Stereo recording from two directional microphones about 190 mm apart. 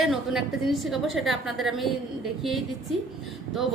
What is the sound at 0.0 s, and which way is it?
A woman's voice, centre (ahead or behind).